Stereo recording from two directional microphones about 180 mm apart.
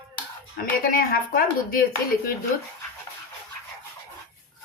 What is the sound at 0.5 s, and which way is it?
Speech, 55° left (ahead or behind).